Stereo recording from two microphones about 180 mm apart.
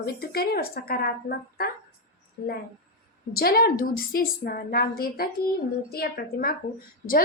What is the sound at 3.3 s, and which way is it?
A woman's voice, 60° left (ahead or behind).